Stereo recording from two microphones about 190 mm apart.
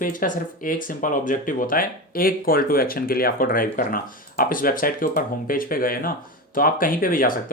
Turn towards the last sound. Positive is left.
turn(degrees=50)  # may be behind; listen again after turning